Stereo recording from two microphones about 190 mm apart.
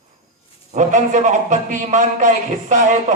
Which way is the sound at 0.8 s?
40° right (ahead or behind).